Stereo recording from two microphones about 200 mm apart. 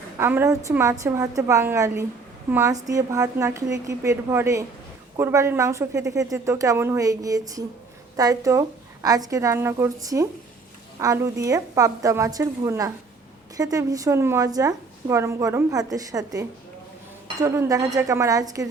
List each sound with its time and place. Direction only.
0.2 s a woman's voice: 10° right (ahead or behind)